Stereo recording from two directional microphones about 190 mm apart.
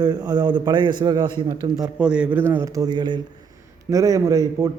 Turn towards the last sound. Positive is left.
turn(degrees=-20)  # may be behind; listen again after turning